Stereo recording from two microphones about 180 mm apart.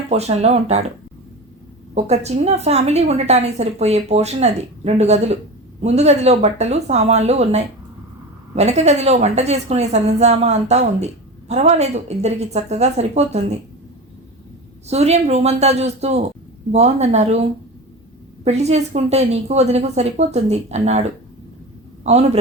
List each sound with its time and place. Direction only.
0.1 s a woman's voice: 35° right (ahead or behind)
2.0 s a woman's voice: 35° right (ahead or behind)
14.8 s a woman's voice: 35° right (ahead or behind)
18.4 s a woman's voice: 35° right (ahead or behind)